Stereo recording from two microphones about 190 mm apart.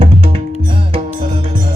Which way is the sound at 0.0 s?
30° right (ahead or behind).